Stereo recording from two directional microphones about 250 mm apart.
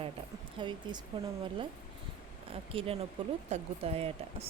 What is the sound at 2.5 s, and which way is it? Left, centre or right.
Speech, right.